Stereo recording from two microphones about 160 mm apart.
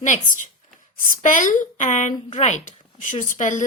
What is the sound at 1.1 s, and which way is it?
A woman's voice, 55° left (ahead or behind).